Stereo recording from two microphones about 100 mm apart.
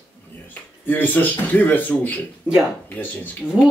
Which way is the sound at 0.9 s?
15° left (ahead or behind).